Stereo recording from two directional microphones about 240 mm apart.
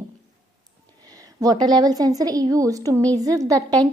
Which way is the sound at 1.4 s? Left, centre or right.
Centre.